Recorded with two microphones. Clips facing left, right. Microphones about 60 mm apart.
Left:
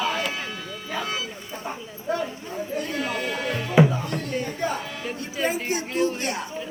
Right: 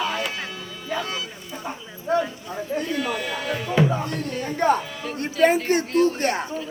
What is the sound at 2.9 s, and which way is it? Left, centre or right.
Music, centre.